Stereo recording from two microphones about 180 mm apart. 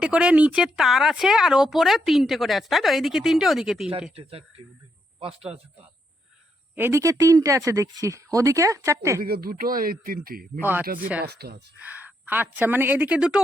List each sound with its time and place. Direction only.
0.0 s speech: 5° right (ahead or behind)
4.1 s speech: 35° right (ahead or behind)
6.7 s speech: 15° right (ahead or behind)
9.2 s a man's voice: 55° right (ahead or behind)
10.6 s speech: 10° right (ahead or behind)
10.8 s a man's voice: 55° right (ahead or behind)
11.8 s speech: 10° right (ahead or behind)